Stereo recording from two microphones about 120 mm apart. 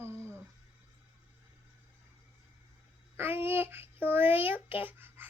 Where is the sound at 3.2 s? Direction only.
20° right (ahead or behind).